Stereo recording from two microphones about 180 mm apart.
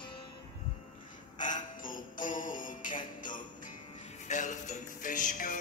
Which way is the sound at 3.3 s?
45° left (ahead or behind).